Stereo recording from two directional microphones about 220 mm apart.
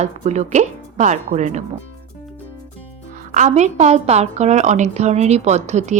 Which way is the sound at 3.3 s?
35° right (ahead or behind).